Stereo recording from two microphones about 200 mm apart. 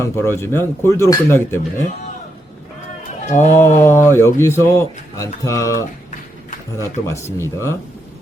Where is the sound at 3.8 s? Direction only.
15° left (ahead or behind).